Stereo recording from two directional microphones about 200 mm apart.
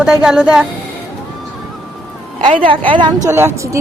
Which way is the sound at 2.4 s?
25° right (ahead or behind).